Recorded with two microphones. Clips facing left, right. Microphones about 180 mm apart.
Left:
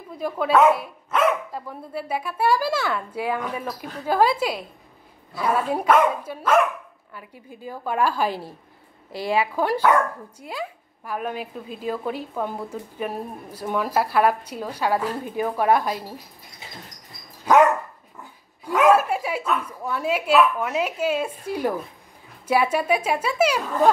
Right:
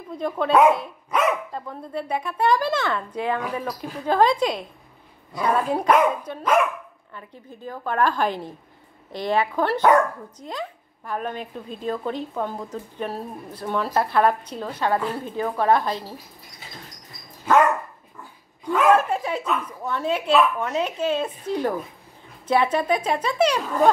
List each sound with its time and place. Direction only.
0.2 s a woman's voice: 5° left (ahead or behind)
18.7 s a woman's voice: 10° left (ahead or behind)